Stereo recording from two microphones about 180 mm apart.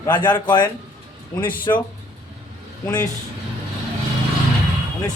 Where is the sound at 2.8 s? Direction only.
20° left (ahead or behind).